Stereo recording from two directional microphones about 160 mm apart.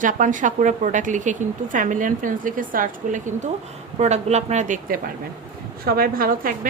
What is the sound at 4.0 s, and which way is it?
A woman's voice, 45° right (ahead or behind).